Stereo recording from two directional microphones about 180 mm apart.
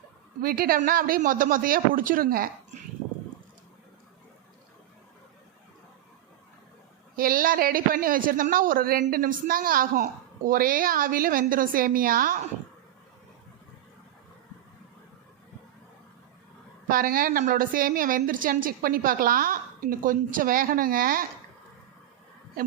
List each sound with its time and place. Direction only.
0.4 s a woman's voice: 55° right (ahead or behind)
7.2 s a woman's voice: 55° right (ahead or behind)
16.9 s a woman's voice: 55° right (ahead or behind)